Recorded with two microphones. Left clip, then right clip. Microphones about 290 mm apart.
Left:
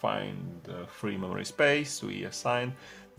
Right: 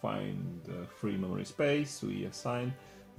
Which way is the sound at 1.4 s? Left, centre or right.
Left.